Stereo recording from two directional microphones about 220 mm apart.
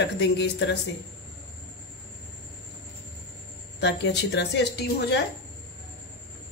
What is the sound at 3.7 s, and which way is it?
A woman's voice, 50° left (ahead or behind).